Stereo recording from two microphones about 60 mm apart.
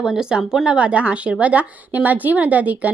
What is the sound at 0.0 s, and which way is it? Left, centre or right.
Speech, centre.